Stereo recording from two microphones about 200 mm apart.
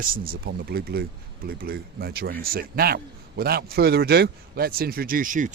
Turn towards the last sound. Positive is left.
turn(degrees=-40)  # may be behind; listen again after turning